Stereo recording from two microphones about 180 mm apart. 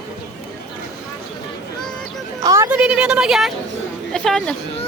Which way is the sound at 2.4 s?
15° right (ahead or behind).